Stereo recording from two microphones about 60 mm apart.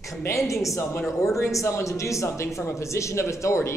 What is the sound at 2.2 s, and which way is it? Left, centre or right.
Speech, left.